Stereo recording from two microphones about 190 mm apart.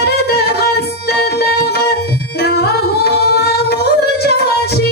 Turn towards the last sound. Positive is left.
turn(degrees=55)  # may be behind; listen again after turning